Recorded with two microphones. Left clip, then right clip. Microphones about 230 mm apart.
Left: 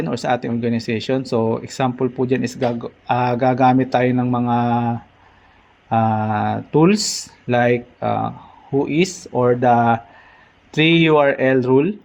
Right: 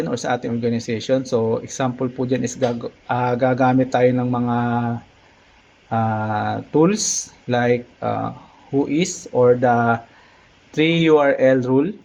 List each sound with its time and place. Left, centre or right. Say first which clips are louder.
0.0 s speech: left 2 dB; left